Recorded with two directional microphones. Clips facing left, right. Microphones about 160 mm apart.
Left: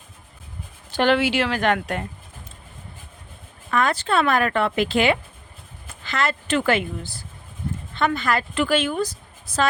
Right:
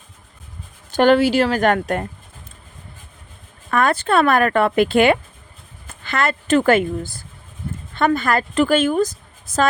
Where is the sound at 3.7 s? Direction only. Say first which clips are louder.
Right 4 dB; 55° right (ahead or behind).